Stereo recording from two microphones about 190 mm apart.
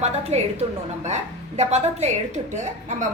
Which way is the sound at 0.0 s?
35° right (ahead or behind).